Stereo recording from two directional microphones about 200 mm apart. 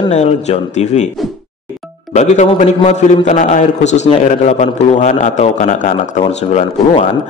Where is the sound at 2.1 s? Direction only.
35° left (ahead or behind).